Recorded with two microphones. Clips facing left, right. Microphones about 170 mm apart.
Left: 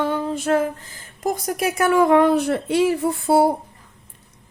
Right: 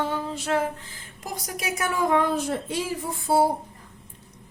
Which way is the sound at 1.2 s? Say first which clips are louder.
Left 10 dB; 55° left (ahead or behind).